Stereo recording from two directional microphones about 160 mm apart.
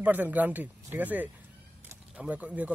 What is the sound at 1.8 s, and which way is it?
Pigeon, 10° right (ahead or behind).